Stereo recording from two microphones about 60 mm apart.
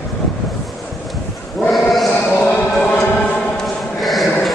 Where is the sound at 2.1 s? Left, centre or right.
Left.